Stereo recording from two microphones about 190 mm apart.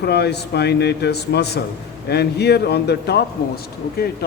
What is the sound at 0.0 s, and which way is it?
Speech, 60° left (ahead or behind).